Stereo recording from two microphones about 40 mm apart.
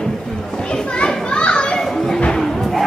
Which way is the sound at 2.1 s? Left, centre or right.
Left.